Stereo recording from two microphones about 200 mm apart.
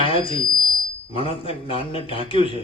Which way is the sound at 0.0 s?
25° left (ahead or behind).